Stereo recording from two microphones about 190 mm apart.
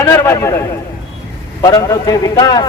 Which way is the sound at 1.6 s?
20° left (ahead or behind).